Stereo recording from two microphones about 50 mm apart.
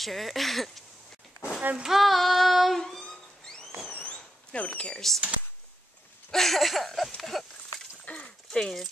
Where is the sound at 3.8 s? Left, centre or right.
Left.